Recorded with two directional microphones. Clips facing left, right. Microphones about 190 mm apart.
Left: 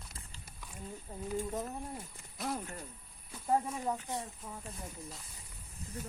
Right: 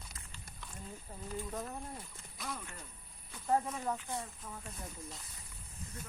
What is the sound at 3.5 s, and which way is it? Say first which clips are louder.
Speech: left 1 dB; 15° left (ahead or behind).